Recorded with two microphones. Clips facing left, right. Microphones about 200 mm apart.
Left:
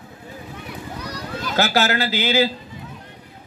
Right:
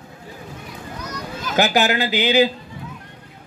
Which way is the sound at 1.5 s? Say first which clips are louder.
Right 2 dB; 15° right (ahead or behind).